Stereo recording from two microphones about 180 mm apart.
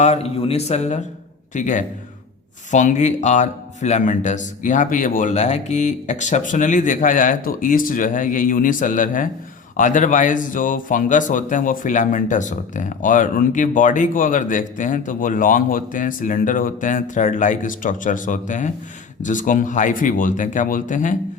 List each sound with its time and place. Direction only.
0.0 s a man's voice: 35° left (ahead or behind)